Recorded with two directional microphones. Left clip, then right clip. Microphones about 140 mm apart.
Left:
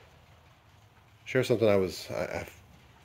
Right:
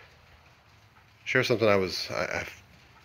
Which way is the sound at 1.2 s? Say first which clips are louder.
Right 2 dB; 20° left (ahead or behind).